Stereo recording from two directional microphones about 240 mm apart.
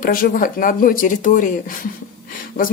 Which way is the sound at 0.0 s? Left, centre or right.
Left.